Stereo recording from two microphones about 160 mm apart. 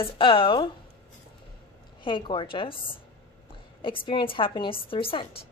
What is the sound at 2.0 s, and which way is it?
Speech, 30° left (ahead or behind).